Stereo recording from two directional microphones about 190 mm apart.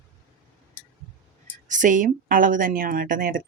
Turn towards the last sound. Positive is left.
turn(degrees=-45)  # may be behind; listen again after turning